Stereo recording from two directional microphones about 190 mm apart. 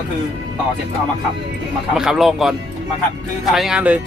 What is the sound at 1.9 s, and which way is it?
Speech, centre (ahead or behind).